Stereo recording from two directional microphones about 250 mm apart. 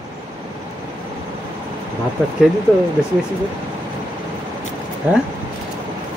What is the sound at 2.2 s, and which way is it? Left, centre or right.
Speech, centre.